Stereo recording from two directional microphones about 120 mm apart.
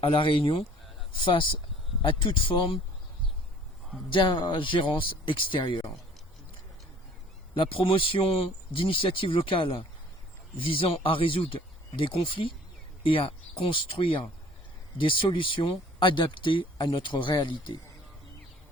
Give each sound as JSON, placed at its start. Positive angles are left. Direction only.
{"t": 0.0, "sound": "speech", "side_deg": 45}
{"t": 4.1, "sound": "speech", "side_deg": 40}
{"t": 7.5, "sound": "speech", "side_deg": 45}